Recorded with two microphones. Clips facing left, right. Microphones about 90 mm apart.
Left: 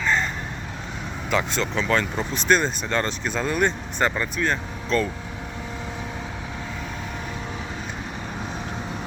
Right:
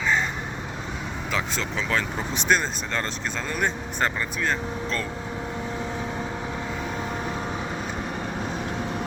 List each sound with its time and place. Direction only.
1.3 s speech: centre (ahead or behind)